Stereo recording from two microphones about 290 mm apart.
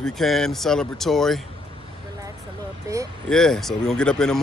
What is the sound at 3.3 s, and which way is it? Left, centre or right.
Speech, centre.